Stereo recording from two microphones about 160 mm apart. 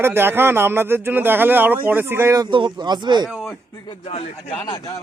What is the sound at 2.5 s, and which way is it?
Speech, 30° right (ahead or behind).